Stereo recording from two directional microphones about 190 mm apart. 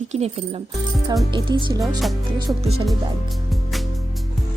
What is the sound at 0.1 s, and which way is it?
Speech, 35° right (ahead or behind).